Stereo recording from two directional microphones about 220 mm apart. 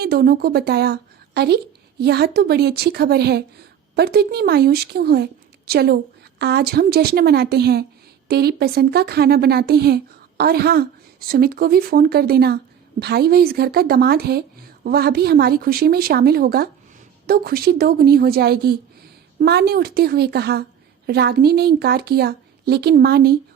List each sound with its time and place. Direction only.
0.0 s speech: 45° right (ahead or behind)